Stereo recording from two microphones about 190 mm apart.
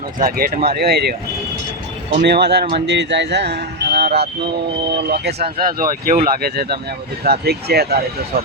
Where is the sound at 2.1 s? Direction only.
60° right (ahead or behind).